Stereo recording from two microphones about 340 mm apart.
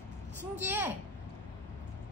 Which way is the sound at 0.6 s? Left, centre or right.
Centre.